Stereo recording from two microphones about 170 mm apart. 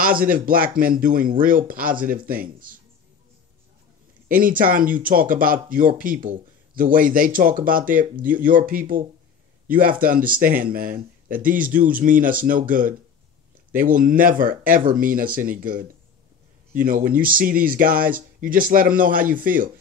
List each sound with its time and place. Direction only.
0.0 s speech: 55° right (ahead or behind)
4.3 s speech: 55° right (ahead or behind)